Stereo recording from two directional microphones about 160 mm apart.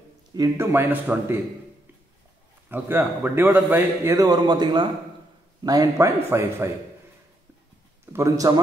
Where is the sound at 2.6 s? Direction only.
15° right (ahead or behind).